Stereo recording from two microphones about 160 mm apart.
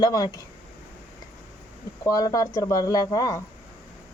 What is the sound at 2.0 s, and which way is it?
A man's voice, 20° left (ahead or behind).